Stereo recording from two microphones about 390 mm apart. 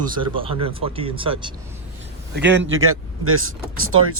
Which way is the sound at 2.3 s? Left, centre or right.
Right.